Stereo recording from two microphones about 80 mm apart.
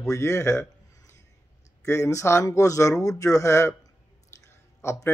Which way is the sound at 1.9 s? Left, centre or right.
Left.